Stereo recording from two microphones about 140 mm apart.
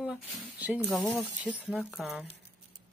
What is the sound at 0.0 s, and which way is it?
Speech, 5° right (ahead or behind).